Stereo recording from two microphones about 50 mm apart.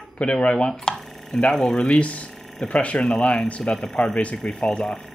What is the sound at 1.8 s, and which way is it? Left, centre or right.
Speech, left.